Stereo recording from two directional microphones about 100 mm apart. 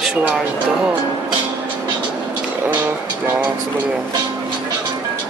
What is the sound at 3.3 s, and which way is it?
Vehicle, 15° right (ahead or behind).